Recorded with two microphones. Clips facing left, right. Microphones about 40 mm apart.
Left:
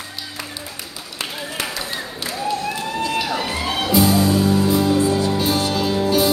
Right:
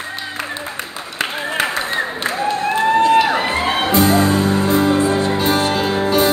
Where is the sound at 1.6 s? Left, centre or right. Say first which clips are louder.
Right 9 dB; right.